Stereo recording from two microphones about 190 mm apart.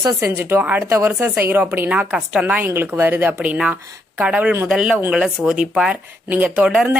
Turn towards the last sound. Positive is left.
turn(degrees=-5)  # may be behind; listen again after turning